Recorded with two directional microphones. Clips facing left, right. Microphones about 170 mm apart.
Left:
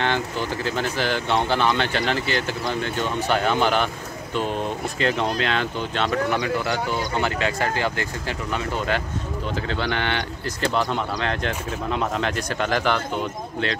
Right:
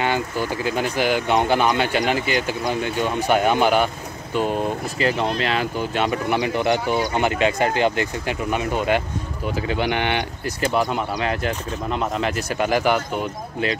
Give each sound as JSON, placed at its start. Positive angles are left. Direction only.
{"t": 0.0, "sound": "speech", "side_deg": -10}
{"t": 4.9, "sound": "speech", "side_deg": -5}